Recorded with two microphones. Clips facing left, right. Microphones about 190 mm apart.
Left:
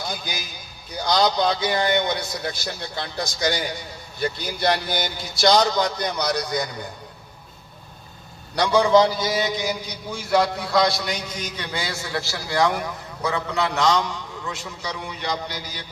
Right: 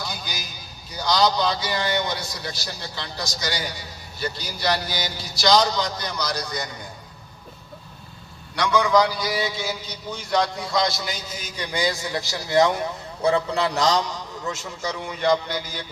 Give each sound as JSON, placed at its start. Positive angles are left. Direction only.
{"t": 0.0, "sound": "a man's voice", "side_deg": 50}
{"t": 8.5, "sound": "a man's voice", "side_deg": 30}